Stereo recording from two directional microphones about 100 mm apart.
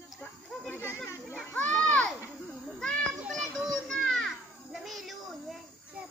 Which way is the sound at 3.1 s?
Centre (ahead or behind).